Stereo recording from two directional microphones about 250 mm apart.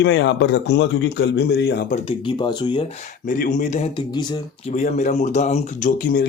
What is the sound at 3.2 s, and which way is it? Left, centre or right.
Speech, left.